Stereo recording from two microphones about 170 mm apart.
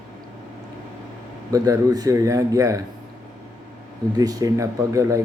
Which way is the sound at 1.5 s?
20° right (ahead or behind).